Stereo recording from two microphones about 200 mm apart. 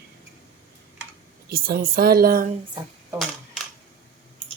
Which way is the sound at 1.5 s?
50° right (ahead or behind).